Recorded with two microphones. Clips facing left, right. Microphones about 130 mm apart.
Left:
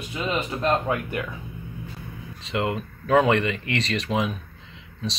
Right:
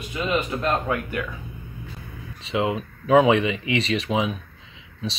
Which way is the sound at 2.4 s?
Centre (ahead or behind).